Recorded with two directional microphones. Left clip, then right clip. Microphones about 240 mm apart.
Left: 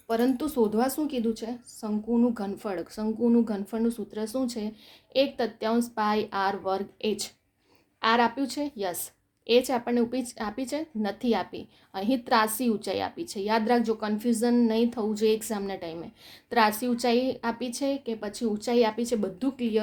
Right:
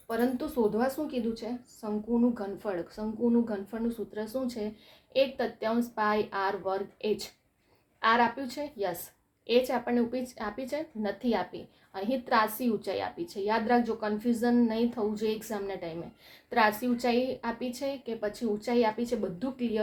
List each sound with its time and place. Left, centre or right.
0.1 s a woman's voice: left